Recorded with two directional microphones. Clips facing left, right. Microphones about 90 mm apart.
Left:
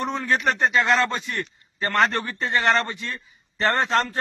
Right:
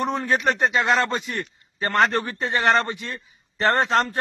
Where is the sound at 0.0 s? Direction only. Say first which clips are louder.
Right 1 dB; 20° right (ahead or behind).